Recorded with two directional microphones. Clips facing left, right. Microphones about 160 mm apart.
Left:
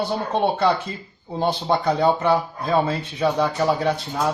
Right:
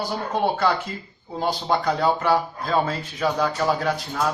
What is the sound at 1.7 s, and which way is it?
Speech, 25° left (ahead or behind).